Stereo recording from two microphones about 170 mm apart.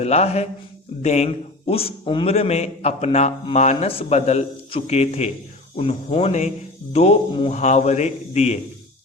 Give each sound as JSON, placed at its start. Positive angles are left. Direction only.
{"t": 0.0, "sound": "a man's voice", "side_deg": 40}